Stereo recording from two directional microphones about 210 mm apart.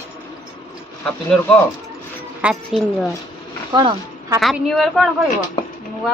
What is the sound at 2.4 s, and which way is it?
Speech, centre (ahead or behind).